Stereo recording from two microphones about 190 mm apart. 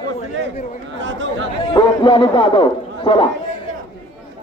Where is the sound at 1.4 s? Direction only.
25° left (ahead or behind).